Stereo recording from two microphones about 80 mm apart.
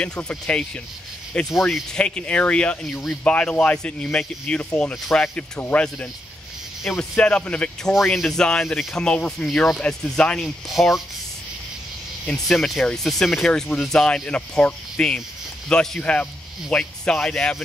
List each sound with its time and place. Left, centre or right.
0.0 s speech: centre
6.8 s speech: centre
7.9 s speech: centre
10.7 s speech: centre
12.3 s speech: centre